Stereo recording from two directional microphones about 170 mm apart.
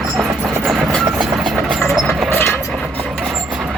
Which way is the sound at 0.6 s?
Centre (ahead or behind).